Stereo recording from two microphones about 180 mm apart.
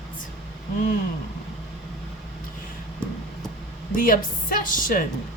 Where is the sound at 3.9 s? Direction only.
50° left (ahead or behind).